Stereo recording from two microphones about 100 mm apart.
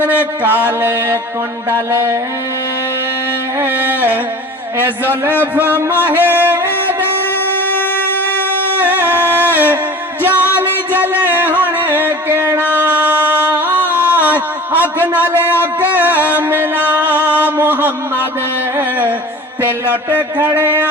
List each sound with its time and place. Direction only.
0.4 s mantra: 20° right (ahead or behind)
3.6 s music: 20° right (ahead or behind)
5.4 s music: 15° right (ahead or behind)
8.8 s music: 20° right (ahead or behind)
13.7 s singing: 20° right (ahead or behind)
14.7 s a man's voice: 20° right (ahead or behind)
15.8 s music: 15° right (ahead or behind)
17.2 s a sound: 20° left (ahead or behind)
17.6 s a sound: 20° right (ahead or behind)
18.8 s carnatic music: 20° right (ahead or behind)
20.1 s mantra: 20° right (ahead or behind)
20.6 s a sound: 20° right (ahead or behind)